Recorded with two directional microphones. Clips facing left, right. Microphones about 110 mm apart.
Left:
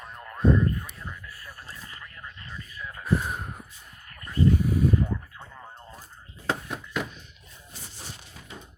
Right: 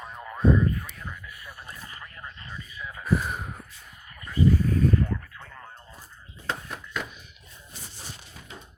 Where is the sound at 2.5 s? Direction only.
5° right (ahead or behind).